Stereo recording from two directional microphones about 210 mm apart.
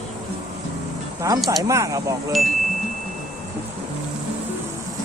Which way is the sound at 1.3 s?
15° right (ahead or behind).